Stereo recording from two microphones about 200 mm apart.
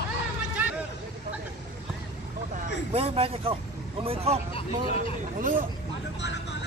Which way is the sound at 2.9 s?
30° right (ahead or behind).